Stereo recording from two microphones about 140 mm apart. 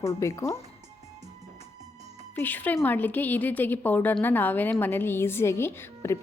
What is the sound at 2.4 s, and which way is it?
A woman's voice, 10° left (ahead or behind).